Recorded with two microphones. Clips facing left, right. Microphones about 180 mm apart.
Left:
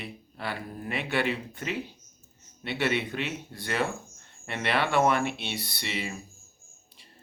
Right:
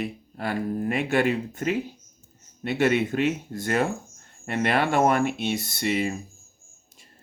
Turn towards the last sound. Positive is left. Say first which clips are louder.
# right 9 dB
turn(degrees=-45)  # may be behind; listen again after turning